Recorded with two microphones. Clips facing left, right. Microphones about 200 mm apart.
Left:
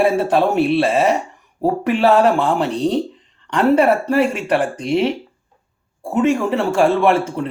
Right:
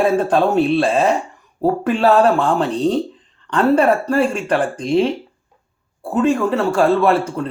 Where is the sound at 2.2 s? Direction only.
15° left (ahead or behind).